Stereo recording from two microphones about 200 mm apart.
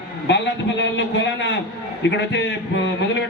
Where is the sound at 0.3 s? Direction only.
60° left (ahead or behind).